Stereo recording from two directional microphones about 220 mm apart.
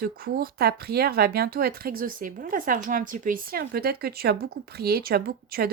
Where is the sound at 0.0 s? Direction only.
40° right (ahead or behind).